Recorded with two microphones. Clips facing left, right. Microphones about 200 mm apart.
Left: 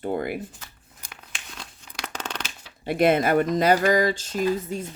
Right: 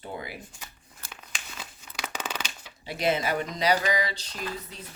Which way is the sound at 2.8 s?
55° left (ahead or behind).